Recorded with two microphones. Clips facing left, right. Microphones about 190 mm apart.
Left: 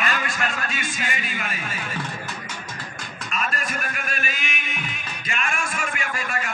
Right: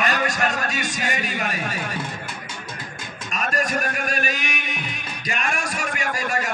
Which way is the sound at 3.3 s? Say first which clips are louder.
Right 5 dB; 45° right (ahead or behind).